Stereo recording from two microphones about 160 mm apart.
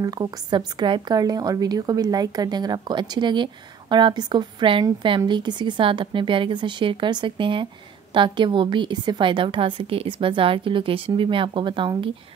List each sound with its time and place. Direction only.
0.0 s a woman's voice: 25° right (ahead or behind)